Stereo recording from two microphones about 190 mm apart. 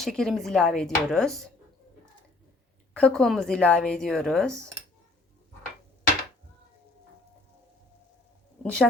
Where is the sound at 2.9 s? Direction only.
5° left (ahead or behind).